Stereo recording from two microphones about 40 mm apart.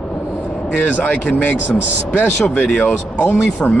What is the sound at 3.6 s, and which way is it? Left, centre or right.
Speech, centre.